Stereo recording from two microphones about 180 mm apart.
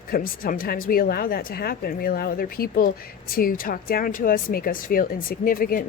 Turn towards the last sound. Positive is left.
turn(degrees=50)  # may be behind; listen again after turning